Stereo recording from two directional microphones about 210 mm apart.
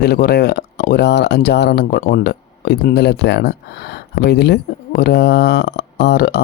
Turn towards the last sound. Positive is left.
turn(degrees=50)  # may be behind; listen again after turning